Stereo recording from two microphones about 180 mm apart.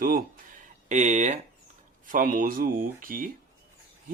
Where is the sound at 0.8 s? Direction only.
40° right (ahead or behind).